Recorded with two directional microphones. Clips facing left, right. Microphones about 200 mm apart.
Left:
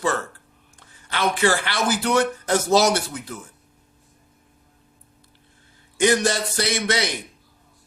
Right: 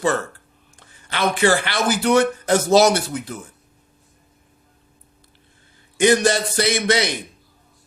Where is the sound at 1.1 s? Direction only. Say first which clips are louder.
Right 3 dB; 20° right (ahead or behind).